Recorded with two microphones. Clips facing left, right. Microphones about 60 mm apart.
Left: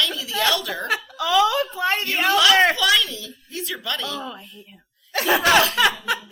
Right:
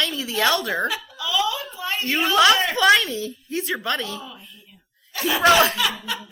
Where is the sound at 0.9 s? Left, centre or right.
Left.